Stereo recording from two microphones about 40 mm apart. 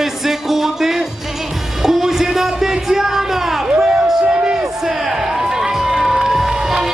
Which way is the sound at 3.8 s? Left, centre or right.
Centre.